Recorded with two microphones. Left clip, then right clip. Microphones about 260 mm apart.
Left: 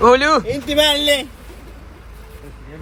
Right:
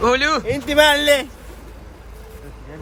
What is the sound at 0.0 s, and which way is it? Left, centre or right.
Speech, centre.